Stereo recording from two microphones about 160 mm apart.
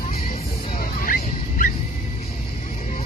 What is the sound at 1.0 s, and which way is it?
Dog, 60° left (ahead or behind).